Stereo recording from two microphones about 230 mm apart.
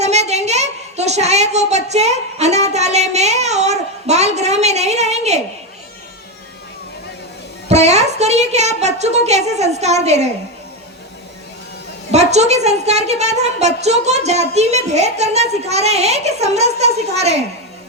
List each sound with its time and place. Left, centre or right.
0.0 s a sound: right
7.7 s a woman's voice: right
12.1 s a woman's voice: right